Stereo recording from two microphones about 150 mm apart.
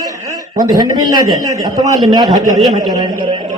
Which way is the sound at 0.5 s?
25° right (ahead or behind).